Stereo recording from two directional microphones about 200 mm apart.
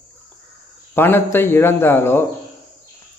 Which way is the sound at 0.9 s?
10° left (ahead or behind).